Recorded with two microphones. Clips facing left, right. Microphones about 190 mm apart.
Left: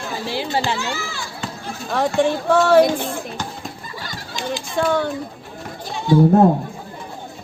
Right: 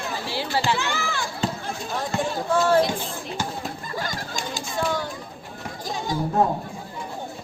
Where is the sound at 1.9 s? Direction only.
70° left (ahead or behind).